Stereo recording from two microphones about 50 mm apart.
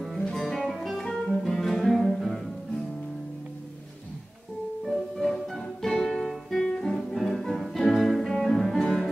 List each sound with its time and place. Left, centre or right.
0.3 s music: centre
4.8 s music: centre